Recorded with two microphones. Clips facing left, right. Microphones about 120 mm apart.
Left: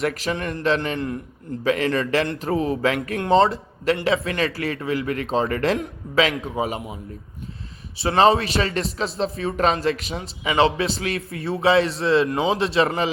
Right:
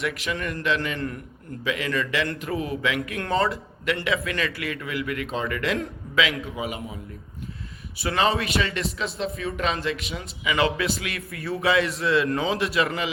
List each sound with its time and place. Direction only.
0.0 s a man's voice: 35° left (ahead or behind)
1.6 s speech: 40° left (ahead or behind)
3.2 s speech: 25° left (ahead or behind)